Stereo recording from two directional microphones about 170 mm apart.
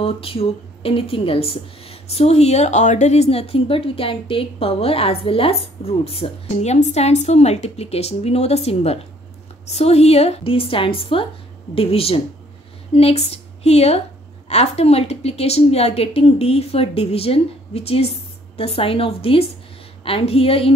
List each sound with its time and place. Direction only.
0.0 s a woman's voice: 35° left (ahead or behind)